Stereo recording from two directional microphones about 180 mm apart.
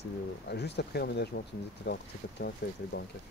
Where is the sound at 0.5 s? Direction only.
70° left (ahead or behind).